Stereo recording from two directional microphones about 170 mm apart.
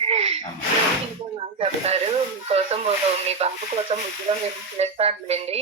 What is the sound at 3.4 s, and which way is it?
Speech, 35° right (ahead or behind).